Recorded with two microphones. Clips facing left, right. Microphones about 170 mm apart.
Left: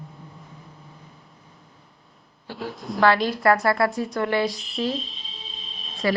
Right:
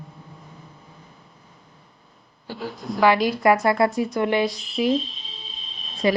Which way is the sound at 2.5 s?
Centre (ahead or behind).